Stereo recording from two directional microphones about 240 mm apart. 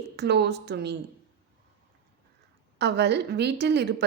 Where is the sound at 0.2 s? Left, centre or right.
Right.